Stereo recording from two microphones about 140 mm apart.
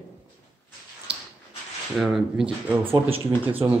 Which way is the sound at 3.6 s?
30° right (ahead or behind).